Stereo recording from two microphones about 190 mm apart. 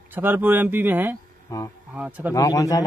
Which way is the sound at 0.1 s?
10° right (ahead or behind).